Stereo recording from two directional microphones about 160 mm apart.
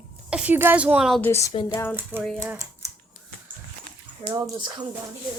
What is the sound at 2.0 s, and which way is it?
Speech, 10° right (ahead or behind).